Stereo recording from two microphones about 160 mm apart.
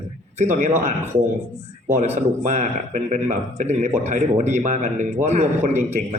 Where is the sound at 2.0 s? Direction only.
50° right (ahead or behind).